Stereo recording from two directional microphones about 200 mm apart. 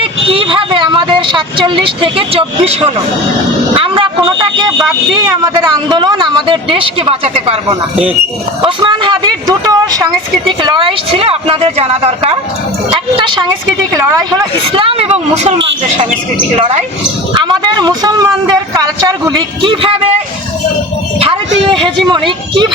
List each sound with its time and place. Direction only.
0.3 s speech: 25° right (ahead or behind)
21.7 s speech: 25° right (ahead or behind)